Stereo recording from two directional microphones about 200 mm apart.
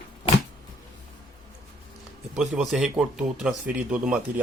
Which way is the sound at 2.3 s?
Centre (ahead or behind).